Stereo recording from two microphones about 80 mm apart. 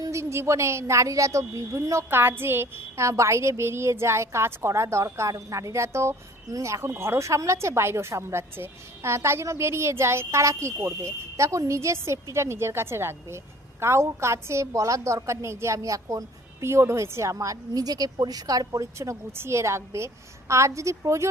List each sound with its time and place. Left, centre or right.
0.0 s speech: right